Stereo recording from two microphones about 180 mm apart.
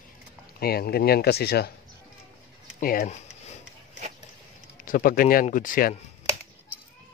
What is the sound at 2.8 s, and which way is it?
Speech, 50° left (ahead or behind).